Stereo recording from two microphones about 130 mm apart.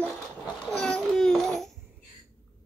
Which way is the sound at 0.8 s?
5° left (ahead or behind).